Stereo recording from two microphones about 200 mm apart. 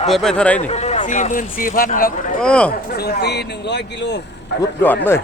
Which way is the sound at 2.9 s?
50° left (ahead or behind).